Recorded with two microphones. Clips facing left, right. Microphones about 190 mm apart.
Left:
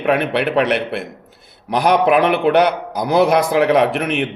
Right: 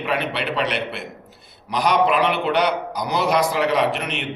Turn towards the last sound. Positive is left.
turn(degrees=55)  # may be behind; listen again after turning